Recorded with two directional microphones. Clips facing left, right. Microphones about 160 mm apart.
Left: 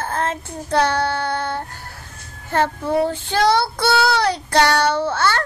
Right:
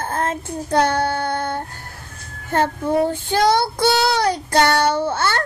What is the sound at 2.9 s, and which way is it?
Child singing, 15° right (ahead or behind).